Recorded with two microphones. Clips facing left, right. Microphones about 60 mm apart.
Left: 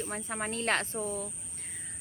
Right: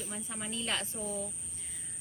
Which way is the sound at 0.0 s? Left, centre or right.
Left.